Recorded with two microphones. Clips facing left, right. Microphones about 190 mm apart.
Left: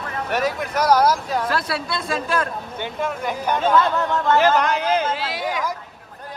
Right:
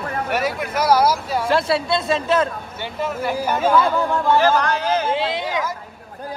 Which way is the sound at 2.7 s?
5° right (ahead or behind).